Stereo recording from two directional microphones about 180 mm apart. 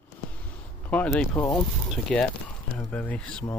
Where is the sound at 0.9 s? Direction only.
5° left (ahead or behind).